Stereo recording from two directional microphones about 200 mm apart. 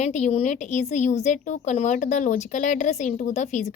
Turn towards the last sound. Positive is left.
turn(degrees=35)  # may be behind; listen again after turning